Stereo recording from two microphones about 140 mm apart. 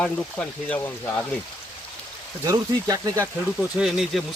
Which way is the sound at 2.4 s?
25° right (ahead or behind).